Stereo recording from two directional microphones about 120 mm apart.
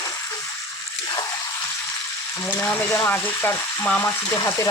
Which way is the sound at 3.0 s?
15° left (ahead or behind).